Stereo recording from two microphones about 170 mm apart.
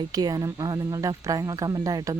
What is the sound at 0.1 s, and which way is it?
Speech, 20° right (ahead or behind).